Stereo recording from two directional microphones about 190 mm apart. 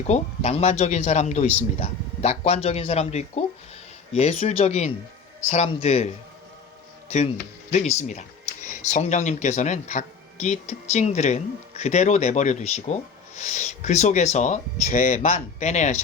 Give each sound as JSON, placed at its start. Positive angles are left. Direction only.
{"t": 0.1, "sound": "speech", "side_deg": 35}
{"t": 7.7, "sound": "speech", "side_deg": 35}